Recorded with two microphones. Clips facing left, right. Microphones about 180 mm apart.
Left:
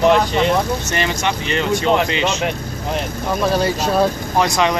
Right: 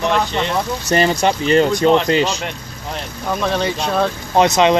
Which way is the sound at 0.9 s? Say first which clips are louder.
Right 5 dB; 35° right (ahead or behind).